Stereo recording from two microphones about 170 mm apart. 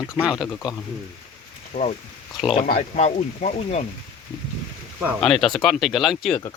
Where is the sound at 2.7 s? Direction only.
40° left (ahead or behind).